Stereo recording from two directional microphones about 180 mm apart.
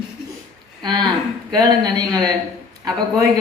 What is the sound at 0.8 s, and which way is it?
A man's voice, 25° right (ahead or behind).